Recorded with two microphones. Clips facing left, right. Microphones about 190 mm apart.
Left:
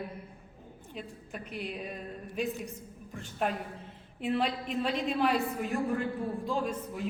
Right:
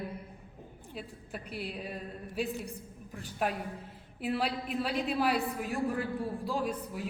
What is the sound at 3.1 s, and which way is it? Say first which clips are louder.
A woman's voice: left 1 dB; 5° right (ahead or behind).